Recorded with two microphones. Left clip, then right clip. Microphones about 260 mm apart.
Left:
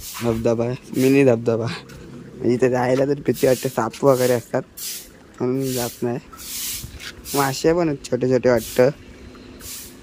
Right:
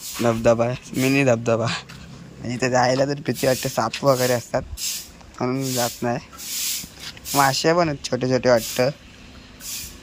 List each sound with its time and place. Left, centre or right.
0.3 s speech: centre
2.4 s speech: centre